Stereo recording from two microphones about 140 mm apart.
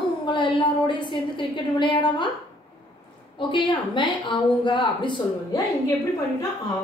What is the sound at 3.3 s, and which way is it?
A woman's voice, 35° left (ahead or behind).